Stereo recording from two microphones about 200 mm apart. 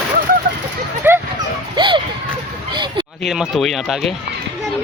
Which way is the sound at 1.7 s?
25° right (ahead or behind).